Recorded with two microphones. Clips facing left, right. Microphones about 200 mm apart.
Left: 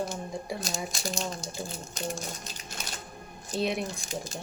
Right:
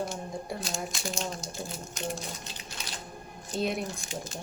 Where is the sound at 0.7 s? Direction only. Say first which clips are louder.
Even; centre (ahead or behind).